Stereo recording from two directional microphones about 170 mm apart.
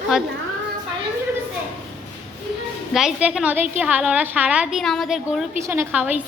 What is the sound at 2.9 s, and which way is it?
A woman's voice, 5° right (ahead or behind).